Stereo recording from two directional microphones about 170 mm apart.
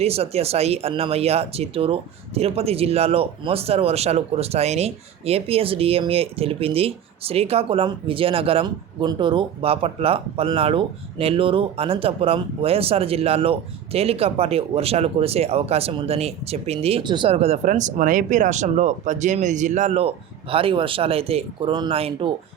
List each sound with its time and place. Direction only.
0.0 s speech: 35° right (ahead or behind)